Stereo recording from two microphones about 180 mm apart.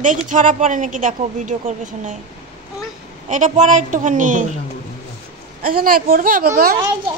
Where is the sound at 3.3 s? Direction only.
45° right (ahead or behind).